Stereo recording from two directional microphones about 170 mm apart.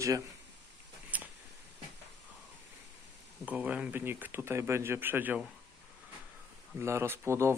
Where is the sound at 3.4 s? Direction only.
10° right (ahead or behind).